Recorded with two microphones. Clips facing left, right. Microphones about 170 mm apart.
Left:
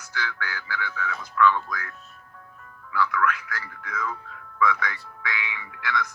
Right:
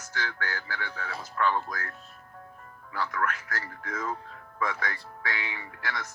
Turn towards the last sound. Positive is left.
turn(degrees=-35)  # may be behind; listen again after turning